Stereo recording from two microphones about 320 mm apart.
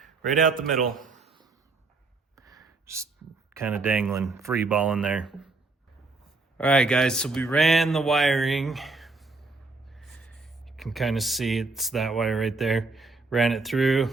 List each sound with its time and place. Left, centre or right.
0.3 s a man's voice: right
0.6 s speech: centre
2.3 s sigh: centre
3.5 s speech: centre
6.6 s speech: centre